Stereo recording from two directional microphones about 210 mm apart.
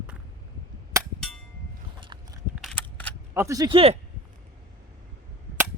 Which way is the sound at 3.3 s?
15° right (ahead or behind).